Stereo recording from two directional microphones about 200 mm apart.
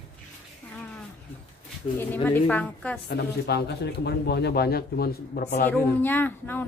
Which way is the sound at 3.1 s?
55° left (ahead or behind).